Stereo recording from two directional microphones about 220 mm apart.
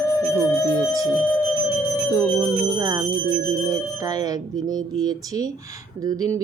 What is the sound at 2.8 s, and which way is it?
A woman's voice, 15° right (ahead or behind).